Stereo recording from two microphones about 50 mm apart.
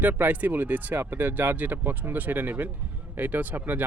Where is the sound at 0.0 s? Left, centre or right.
Right.